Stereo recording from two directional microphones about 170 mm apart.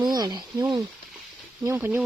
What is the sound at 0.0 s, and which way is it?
Speech, 25° right (ahead or behind).